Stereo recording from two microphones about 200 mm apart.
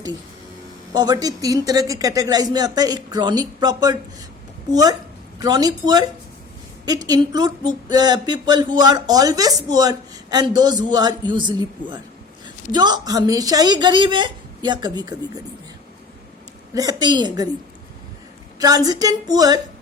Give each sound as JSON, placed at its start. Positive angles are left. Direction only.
{"t": 0.9, "sound": "speech", "side_deg": -20}
{"t": 16.7, "sound": "speech", "side_deg": -20}
{"t": 18.6, "sound": "speech", "side_deg": -20}